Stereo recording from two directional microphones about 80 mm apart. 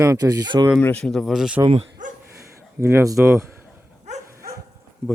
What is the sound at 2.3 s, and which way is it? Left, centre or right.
Speech, right.